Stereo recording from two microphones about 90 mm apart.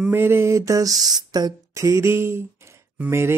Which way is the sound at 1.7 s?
35° right (ahead or behind).